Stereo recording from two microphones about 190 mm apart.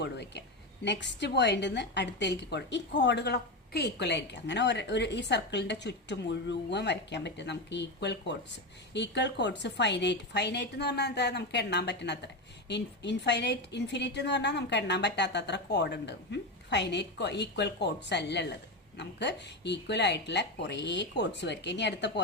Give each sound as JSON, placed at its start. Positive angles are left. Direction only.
{"t": 0.0, "sound": "a woman's voice", "side_deg": 65}